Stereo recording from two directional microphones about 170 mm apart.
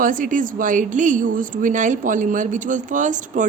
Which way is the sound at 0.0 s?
50° right (ahead or behind).